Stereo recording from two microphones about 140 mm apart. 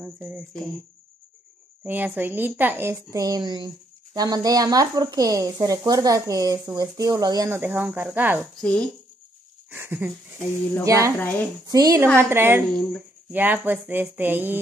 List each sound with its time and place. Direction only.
0.0 s a sound: 5° right (ahead or behind)
1.9 s speech: 15° right (ahead or behind)
3.0 s speech: 25° right (ahead or behind)
8.5 s speech: 5° left (ahead or behind)
9.7 s speech: 15° right (ahead or behind)
11.1 s speech: 10° left (ahead or behind)
11.6 s speech: 25° right (ahead or behind)
12.2 s speech: 15° right (ahead or behind)